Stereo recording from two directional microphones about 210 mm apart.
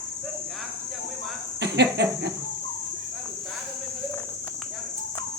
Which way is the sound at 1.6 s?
55° right (ahead or behind).